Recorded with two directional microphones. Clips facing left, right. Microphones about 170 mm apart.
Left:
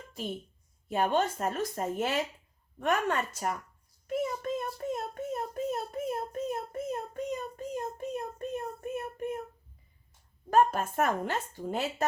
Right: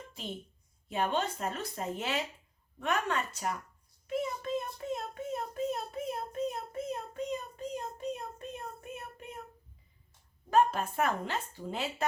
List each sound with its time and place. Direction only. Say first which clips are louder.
0.9 s speech: left 4 dB; 45° left (ahead or behind)
4.0 s a sound: left 3 dB; 50° left (ahead or behind)
10.5 s speech: left 2 dB; 45° left (ahead or behind)